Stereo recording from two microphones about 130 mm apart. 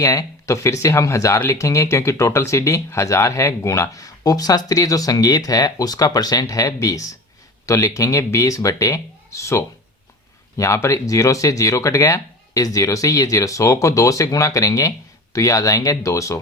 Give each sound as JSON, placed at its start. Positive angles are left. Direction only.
{"t": 0.0, "sound": "speech", "side_deg": 25}